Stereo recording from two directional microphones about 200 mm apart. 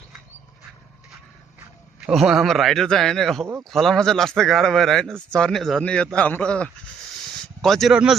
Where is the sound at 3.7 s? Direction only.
Centre (ahead or behind).